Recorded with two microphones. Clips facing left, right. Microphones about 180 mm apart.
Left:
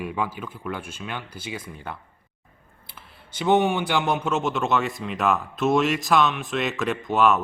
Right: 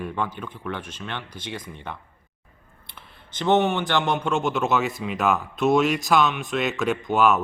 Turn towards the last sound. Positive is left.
turn(degrees=0)  # may be behind; listen again after turning